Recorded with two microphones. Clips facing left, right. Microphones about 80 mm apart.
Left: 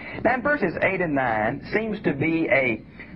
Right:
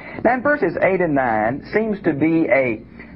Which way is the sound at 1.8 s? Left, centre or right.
Right.